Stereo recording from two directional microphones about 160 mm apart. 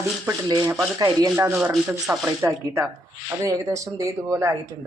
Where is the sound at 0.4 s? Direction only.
25° right (ahead or behind).